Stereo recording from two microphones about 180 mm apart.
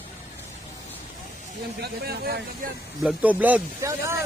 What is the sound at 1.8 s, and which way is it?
Speech, 60° right (ahead or behind).